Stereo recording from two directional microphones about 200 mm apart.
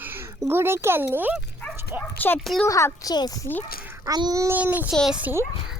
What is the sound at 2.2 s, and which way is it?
Speech, 5° left (ahead or behind).